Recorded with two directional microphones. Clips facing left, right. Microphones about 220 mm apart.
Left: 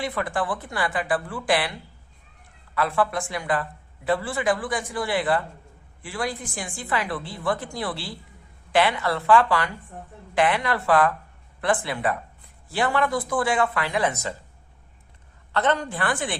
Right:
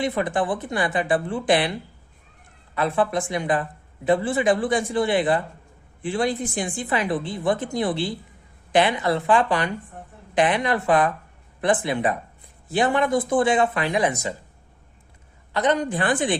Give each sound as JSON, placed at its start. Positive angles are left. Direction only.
{"t": 0.0, "sound": "speech", "side_deg": -20}
{"t": 2.7, "sound": "speech", "side_deg": -20}
{"t": 15.5, "sound": "speech", "side_deg": -15}